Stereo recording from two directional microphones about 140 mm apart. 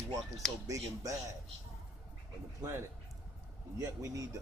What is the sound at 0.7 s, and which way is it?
Speech, 25° right (ahead or behind).